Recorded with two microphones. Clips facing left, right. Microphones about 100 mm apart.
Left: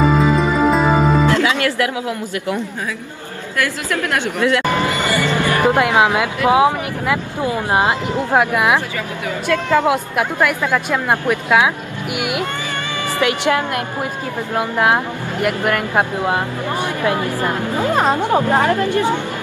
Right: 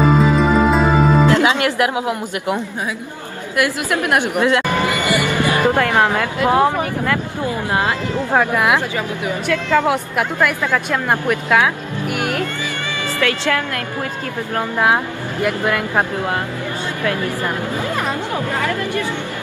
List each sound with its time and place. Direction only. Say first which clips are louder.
0.2 s music: right 1 dB; centre (ahead or behind)
1.2 s a woman's voice: right 1 dB; 20° right (ahead or behind)
4.8 s vehicle: even; 15° right (ahead or behind)
5.6 s speech: left 2 dB; 15° left (ahead or behind)
13.2 s speech: left 2 dB; 20° left (ahead or behind)